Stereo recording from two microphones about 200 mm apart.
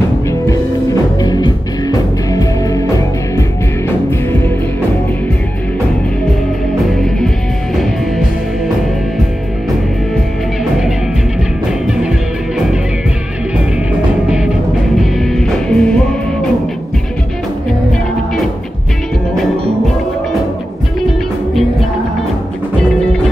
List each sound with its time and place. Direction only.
1.2 s music: 20° left (ahead or behind)
15.0 s music: centre (ahead or behind)